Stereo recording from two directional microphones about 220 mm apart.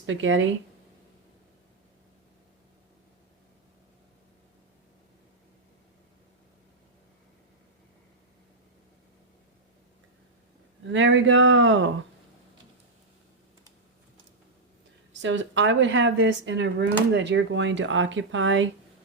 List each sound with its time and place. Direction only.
0.0 s speech: 60° right (ahead or behind)
10.9 s speech: 60° right (ahead or behind)
15.2 s speech: 55° right (ahead or behind)